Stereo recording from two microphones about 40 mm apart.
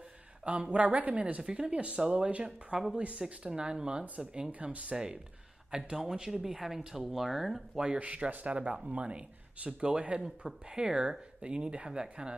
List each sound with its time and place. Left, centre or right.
0.5 s speech: right
1.4 s speech: centre
7.0 s speech: centre
7.7 s speech: centre
8.0 s speech: right